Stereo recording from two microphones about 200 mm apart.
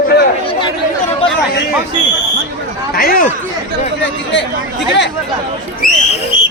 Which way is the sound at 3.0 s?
45° left (ahead or behind).